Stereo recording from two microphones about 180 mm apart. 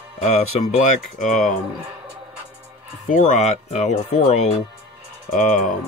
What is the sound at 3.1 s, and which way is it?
Speech, 45° left (ahead or behind).